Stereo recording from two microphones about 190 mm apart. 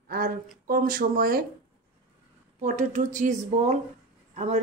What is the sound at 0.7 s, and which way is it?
Speech, 50° right (ahead or behind).